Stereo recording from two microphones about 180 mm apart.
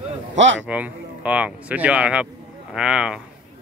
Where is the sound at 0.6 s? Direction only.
10° right (ahead or behind).